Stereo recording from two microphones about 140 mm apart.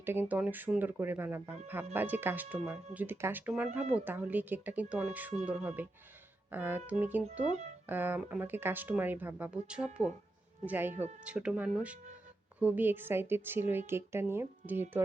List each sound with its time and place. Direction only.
0.0 s speech: 15° right (ahead or behind)